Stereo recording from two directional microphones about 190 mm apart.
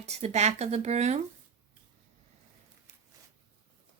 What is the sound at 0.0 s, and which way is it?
Speech, 35° right (ahead or behind).